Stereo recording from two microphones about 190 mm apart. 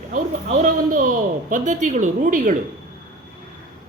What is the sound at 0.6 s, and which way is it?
A man's voice, 45° right (ahead or behind).